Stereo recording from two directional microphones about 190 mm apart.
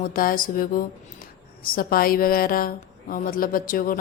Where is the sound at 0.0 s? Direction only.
50° left (ahead or behind).